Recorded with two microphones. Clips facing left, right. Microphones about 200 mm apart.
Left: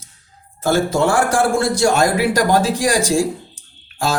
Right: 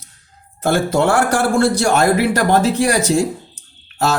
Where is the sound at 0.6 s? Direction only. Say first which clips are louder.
Right 1 dB; 60° right (ahead or behind).